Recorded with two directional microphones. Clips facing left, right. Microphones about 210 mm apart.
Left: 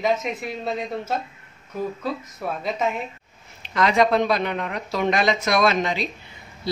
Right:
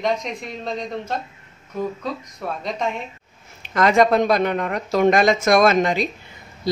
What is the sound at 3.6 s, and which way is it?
Speech, 50° right (ahead or behind).